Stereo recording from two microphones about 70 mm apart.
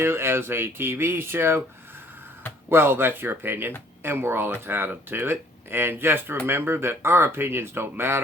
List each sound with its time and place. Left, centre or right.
0.0 s speech: right
2.6 s speech: right